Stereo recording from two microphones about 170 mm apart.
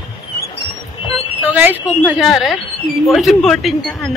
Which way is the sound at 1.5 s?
10° right (ahead or behind).